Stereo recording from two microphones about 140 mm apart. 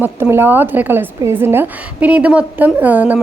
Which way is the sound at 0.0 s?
15° right (ahead or behind).